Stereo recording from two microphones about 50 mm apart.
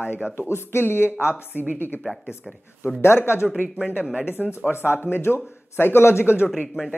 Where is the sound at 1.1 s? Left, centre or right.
Right.